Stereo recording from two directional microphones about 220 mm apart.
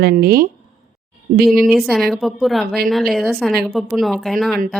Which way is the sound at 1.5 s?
Centre (ahead or behind).